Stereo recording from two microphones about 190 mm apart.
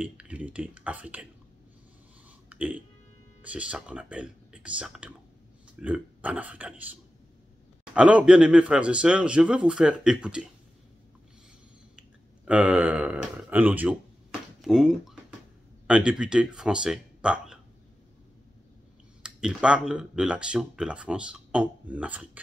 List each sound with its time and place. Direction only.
0.0 s speech: 5° right (ahead or behind)
2.5 s speech: 10° right (ahead or behind)
12.4 s speech: 5° right (ahead or behind)
19.2 s speech: 5° right (ahead or behind)